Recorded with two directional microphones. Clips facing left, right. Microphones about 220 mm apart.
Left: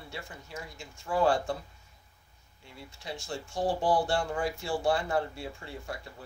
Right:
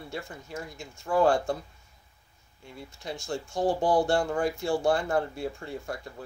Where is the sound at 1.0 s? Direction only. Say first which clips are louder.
Right 3 dB; 45° right (ahead or behind).